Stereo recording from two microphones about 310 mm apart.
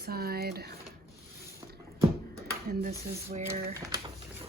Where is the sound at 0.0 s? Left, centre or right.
Right.